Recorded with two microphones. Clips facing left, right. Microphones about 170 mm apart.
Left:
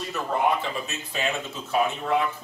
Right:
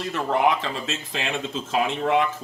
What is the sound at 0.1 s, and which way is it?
Speech, 90° right.